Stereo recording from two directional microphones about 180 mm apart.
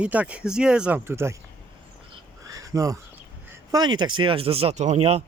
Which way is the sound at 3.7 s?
25° right (ahead or behind).